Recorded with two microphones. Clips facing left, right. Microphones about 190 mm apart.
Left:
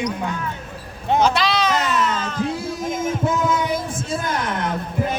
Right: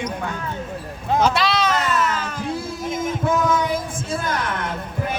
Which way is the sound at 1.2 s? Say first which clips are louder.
Even; 5° right (ahead or behind).